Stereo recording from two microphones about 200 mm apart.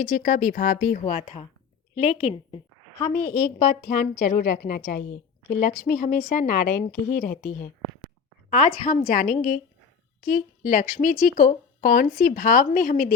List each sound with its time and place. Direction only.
0.0 s a woman's voice: 45° left (ahead or behind)
3.1 s a woman's voice: 45° left (ahead or behind)